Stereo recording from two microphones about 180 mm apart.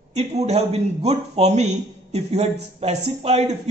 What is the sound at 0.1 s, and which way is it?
A man's voice, 35° right (ahead or behind).